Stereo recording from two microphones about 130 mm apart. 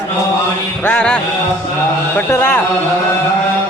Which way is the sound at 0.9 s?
5° left (ahead or behind).